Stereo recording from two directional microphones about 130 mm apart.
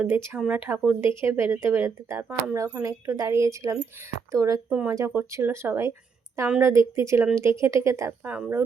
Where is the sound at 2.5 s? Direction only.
25° right (ahead or behind).